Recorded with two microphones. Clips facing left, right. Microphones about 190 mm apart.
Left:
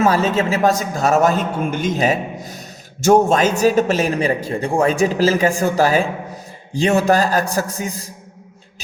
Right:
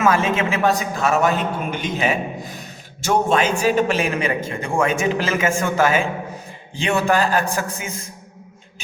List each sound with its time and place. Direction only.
0.0 s a man's voice: 35° left (ahead or behind)